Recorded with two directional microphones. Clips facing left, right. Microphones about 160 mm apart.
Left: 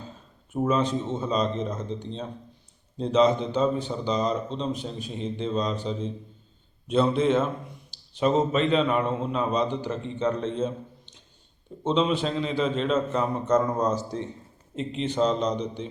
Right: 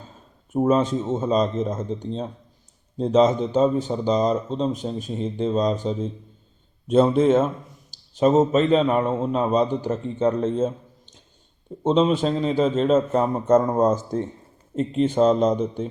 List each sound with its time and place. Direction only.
0.5 s a man's voice: 45° right (ahead or behind)